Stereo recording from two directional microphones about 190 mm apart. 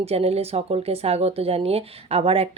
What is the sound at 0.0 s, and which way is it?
Speech, 30° right (ahead or behind).